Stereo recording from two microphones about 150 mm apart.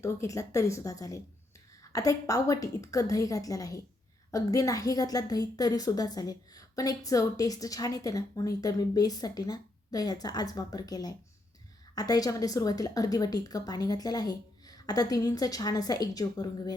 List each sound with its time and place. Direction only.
0.0 s a woman's voice: 20° left (ahead or behind)